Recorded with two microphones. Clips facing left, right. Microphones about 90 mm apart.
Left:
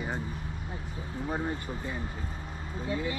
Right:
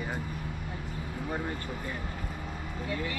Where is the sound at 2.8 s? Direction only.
20° left (ahead or behind).